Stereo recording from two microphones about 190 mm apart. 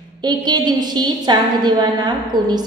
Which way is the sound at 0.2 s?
20° right (ahead or behind).